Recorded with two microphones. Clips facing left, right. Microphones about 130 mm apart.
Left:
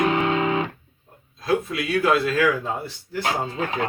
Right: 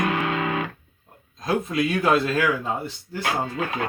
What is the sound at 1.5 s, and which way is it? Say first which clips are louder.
Speech: even; 25° right (ahead or behind).